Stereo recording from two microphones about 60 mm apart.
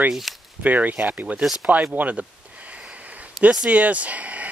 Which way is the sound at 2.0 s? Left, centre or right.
Right.